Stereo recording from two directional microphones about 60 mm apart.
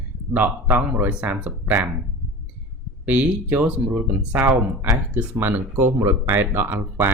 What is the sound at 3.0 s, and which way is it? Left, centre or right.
Speech, right.